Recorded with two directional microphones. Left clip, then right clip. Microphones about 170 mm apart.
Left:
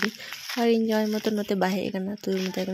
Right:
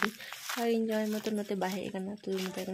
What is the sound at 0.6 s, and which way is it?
Speech, 35° left (ahead or behind).